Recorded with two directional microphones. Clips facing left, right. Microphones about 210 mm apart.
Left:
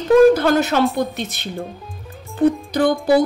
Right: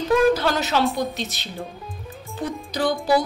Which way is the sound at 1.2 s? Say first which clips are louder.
Left 4 dB; 55° left (ahead or behind).